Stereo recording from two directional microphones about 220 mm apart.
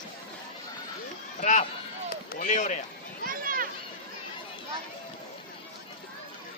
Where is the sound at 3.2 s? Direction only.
40° right (ahead or behind).